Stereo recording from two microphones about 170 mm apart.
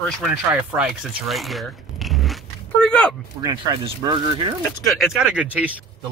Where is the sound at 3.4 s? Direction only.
25° right (ahead or behind).